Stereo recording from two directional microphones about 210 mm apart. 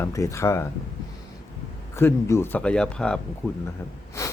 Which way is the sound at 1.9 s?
15° left (ahead or behind).